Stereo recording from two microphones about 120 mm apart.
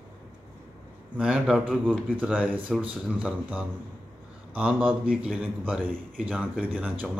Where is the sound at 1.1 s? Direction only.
10° right (ahead or behind).